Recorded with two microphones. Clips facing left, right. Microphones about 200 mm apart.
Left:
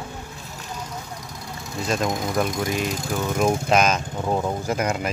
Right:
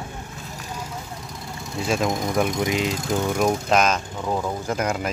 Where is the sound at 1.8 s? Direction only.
Centre (ahead or behind).